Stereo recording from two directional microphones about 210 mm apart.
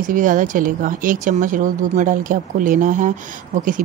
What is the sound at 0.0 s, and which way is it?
Speech, 40° right (ahead or behind).